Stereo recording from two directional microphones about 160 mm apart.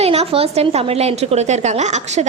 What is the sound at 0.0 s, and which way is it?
A woman's voice, 40° right (ahead or behind).